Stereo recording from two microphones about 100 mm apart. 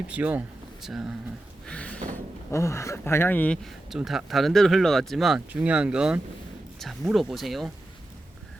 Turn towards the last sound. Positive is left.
turn(degrees=0)  # may be behind; listen again after turning